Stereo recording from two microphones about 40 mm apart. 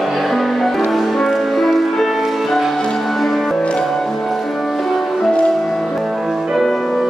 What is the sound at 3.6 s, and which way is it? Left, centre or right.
Music, left.